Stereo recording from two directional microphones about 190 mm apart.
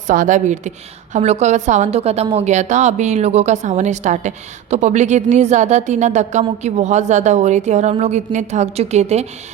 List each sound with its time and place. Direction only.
0.1 s a woman's voice: 45° right (ahead or behind)